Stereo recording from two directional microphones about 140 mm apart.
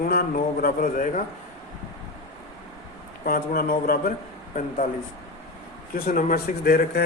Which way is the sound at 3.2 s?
90° left.